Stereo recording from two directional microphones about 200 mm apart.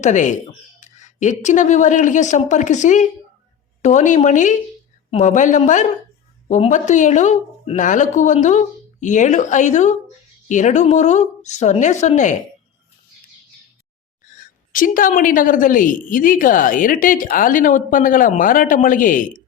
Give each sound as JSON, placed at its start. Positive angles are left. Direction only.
{"t": 0.0, "sound": "speech", "side_deg": 40}
{"t": 14.3, "sound": "a woman's voice", "side_deg": 40}